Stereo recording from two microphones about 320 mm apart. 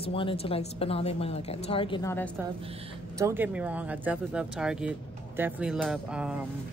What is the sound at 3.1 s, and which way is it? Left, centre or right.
A man's voice, centre.